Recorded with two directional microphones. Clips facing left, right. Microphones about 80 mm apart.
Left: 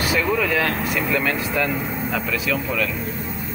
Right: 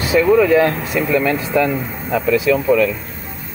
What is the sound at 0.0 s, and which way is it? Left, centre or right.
Speech, right.